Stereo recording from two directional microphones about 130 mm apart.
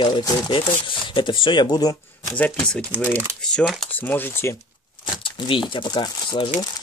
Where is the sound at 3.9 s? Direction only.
15° left (ahead or behind).